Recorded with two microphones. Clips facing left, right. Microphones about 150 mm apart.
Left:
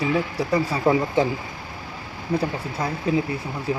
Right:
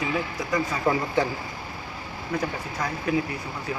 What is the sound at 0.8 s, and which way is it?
Speech, 20° left (ahead or behind).